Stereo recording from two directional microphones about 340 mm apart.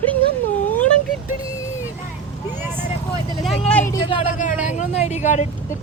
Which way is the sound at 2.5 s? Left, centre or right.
Centre.